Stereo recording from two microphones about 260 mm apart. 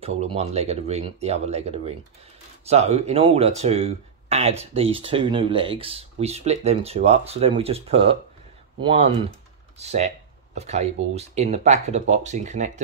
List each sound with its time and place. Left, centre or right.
0.0 s speech: right
9.8 s speech: right